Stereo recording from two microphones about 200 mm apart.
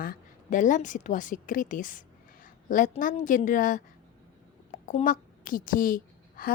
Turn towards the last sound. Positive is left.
turn(degrees=45)  # may be behind; listen again after turning